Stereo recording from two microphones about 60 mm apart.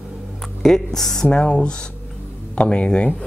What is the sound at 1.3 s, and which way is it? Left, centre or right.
Speech, centre.